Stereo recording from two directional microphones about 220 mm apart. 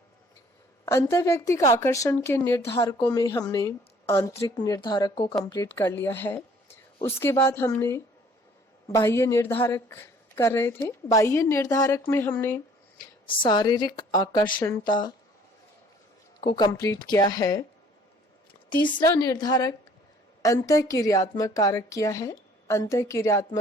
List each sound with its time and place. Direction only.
0.9 s a woman's voice: 10° left (ahead or behind)
5.3 s a woman's voice: 5° left (ahead or behind)
13.2 s speech: 20° left (ahead or behind)
16.4 s a woman's voice: 20° left (ahead or behind)
18.7 s a woman's voice: 20° left (ahead or behind)